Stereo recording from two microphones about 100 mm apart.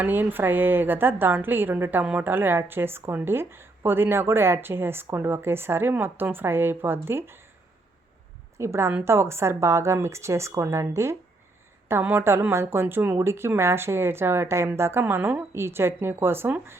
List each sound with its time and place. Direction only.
0.0 s a woman's voice: 20° right (ahead or behind)
8.5 s a woman's voice: 25° right (ahead or behind)